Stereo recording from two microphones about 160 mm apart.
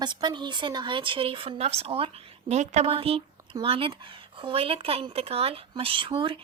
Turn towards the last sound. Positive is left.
turn(degrees=-30)  # may be behind; listen again after turning